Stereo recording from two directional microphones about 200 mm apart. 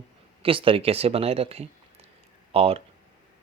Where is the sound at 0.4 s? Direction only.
25° right (ahead or behind).